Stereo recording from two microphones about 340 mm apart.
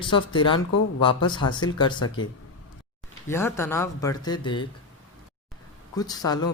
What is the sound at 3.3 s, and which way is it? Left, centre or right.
Speech, centre.